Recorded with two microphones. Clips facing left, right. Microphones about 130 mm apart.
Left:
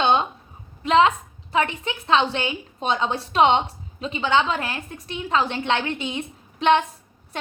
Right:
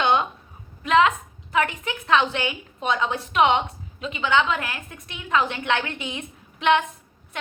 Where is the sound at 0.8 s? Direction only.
30° left (ahead or behind).